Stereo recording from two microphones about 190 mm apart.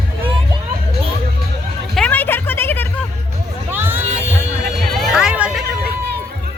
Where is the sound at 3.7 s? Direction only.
10° right (ahead or behind).